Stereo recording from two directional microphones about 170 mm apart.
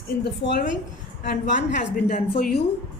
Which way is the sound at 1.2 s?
50° left (ahead or behind).